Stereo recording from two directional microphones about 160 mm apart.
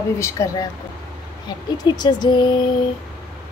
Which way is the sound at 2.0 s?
25° left (ahead or behind).